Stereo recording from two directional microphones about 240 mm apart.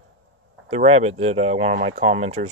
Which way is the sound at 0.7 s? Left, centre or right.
Right.